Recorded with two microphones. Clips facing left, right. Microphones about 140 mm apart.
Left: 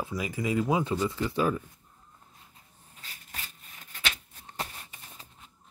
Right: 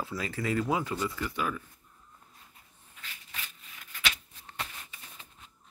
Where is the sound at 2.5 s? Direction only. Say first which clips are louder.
Left 1 dB; 35° left (ahead or behind).